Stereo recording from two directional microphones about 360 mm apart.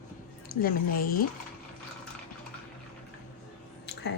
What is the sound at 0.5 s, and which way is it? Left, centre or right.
Speech, left.